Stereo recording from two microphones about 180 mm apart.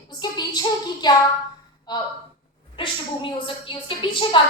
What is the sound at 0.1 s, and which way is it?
Female singing, 25° left (ahead or behind).